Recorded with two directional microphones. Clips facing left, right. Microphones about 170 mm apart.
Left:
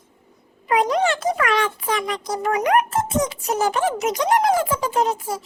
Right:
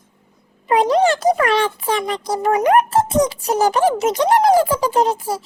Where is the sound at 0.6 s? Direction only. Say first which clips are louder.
Right 4 dB; 30° right (ahead or behind).